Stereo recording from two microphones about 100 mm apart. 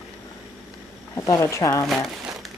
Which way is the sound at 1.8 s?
Centre (ahead or behind).